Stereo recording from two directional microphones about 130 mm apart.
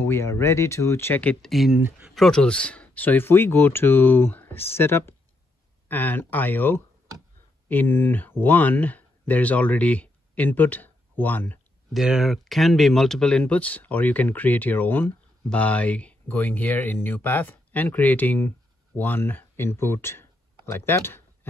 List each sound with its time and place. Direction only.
0.0 s speech: 20° left (ahead or behind); by 1.8 s centre (ahead or behind)
1.8 s speech: 15° right (ahead or behind)
2.0 s speech: centre (ahead or behind)
11.9 s speech: 5° right (ahead or behind); by 21.2 s 15° left (ahead or behind)